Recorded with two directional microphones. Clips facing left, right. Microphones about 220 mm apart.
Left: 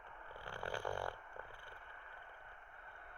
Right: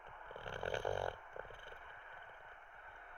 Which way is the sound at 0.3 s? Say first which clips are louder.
Right 3 dB; 20° right (ahead or behind).